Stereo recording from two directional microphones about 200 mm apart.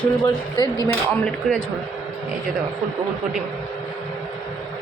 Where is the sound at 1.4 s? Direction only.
5° left (ahead or behind).